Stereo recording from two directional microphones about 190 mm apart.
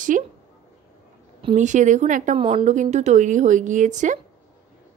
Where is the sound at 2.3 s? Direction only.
30° right (ahead or behind).